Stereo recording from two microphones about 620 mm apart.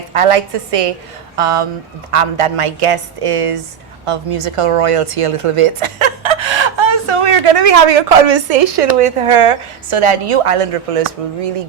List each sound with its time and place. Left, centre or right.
0.1 s a woman's voice: right